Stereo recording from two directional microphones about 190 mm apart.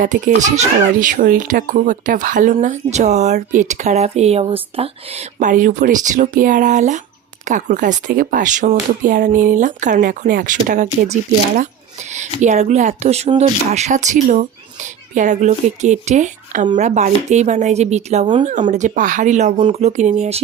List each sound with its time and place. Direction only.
0.0 s a child's voice: 40° right (ahead or behind)